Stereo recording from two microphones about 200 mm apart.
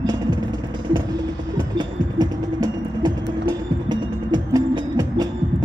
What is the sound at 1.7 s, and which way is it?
Music, 20° right (ahead or behind).